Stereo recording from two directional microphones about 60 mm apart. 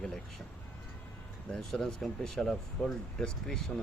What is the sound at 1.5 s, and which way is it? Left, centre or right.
Speech, centre.